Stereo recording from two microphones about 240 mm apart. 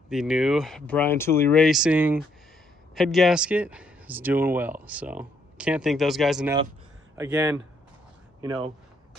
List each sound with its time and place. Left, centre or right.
0.1 s speech: centre